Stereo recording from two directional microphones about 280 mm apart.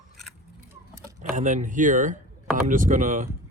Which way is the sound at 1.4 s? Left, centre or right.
Right.